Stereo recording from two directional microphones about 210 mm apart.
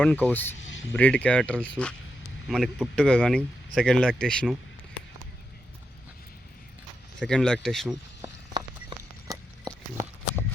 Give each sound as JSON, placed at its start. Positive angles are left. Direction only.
{"t": 0.0, "sound": "speech", "side_deg": 5}
{"t": 7.2, "sound": "speech", "side_deg": 5}
{"t": 8.2, "sound": "a sound", "side_deg": -20}